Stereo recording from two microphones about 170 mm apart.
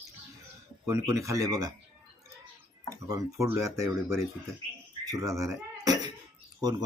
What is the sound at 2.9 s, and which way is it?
Speech, 20° right (ahead or behind).